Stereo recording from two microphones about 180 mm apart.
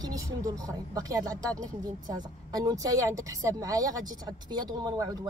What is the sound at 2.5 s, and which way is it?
Speech, 20° right (ahead or behind).